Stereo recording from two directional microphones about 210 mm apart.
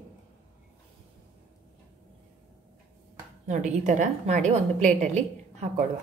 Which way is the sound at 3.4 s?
35° right (ahead or behind).